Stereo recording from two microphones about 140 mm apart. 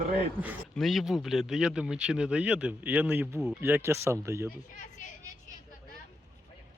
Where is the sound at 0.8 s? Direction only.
Centre (ahead or behind); by 4.5 s 20° right (ahead or behind).